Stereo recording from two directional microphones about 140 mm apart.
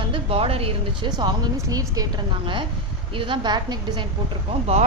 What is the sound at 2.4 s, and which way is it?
Speech, 35° right (ahead or behind).